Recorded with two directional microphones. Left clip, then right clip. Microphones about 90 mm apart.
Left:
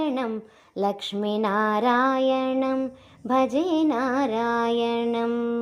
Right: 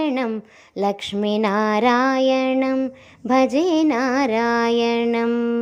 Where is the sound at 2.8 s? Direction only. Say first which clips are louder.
Right 5 dB; 35° right (ahead or behind).